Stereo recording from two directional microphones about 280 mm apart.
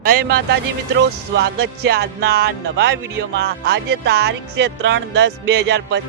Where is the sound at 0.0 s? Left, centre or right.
Right.